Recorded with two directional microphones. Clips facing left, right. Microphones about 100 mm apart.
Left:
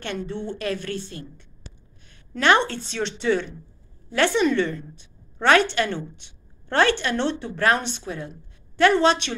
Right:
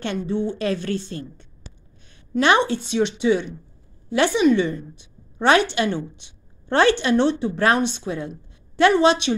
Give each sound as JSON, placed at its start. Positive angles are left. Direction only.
{"t": 0.3, "sound": "a woman's voice", "side_deg": -10}
{"t": 0.6, "sound": "a woman's voice", "side_deg": -25}
{"t": 2.3, "sound": "a woman's voice", "side_deg": -15}